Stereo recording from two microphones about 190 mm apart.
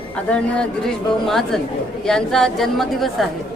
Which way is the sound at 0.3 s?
5° left (ahead or behind).